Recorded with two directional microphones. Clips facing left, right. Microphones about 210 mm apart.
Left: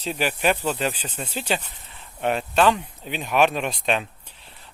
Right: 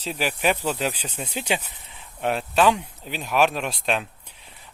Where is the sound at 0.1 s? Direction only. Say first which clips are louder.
Left 1 dB; centre (ahead or behind).